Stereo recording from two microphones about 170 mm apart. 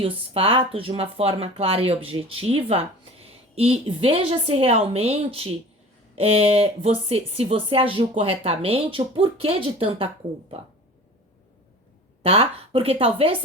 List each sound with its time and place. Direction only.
0.0 s speech: 30° right (ahead or behind)
12.2 s speech: 35° right (ahead or behind)